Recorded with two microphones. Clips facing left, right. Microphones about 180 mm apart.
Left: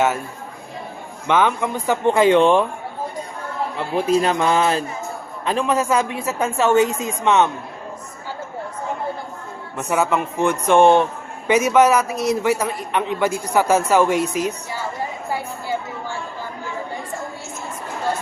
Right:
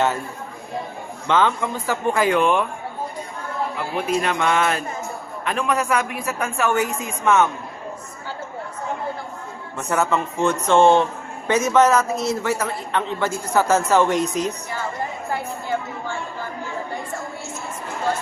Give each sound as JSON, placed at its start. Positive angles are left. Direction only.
{"t": 1.3, "sound": "a woman's voice", "side_deg": 15}
{"t": 3.9, "sound": "music", "side_deg": 30}
{"t": 5.5, "sound": "a woman's voice", "side_deg": 30}
{"t": 9.7, "sound": "a man's voice", "side_deg": 15}